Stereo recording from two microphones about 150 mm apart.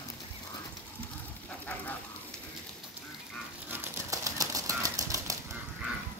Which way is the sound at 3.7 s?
15° right (ahead or behind).